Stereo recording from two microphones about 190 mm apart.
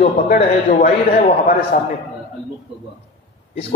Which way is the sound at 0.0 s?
45° left (ahead or behind).